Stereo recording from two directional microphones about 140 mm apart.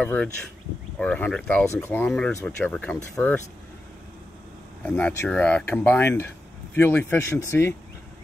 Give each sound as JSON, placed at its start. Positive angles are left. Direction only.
{"t": 0.0, "sound": "speech", "side_deg": 10}
{"t": 4.8, "sound": "speech", "side_deg": 10}